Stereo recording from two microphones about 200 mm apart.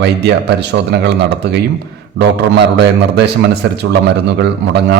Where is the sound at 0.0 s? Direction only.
60° right (ahead or behind).